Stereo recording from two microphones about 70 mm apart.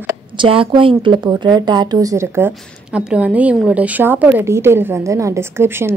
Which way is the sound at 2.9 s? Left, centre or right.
Centre.